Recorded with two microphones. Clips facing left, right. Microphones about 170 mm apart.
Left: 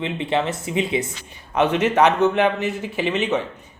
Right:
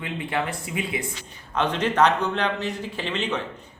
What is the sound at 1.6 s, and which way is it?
A man's voice, 10° left (ahead or behind).